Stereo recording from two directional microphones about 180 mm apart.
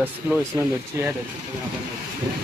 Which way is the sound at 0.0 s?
15° right (ahead or behind).